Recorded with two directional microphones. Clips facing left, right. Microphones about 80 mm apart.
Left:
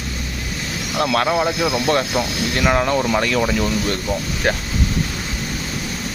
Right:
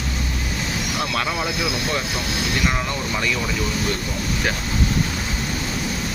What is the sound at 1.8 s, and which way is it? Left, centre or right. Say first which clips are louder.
Speech: left 6 dB; left.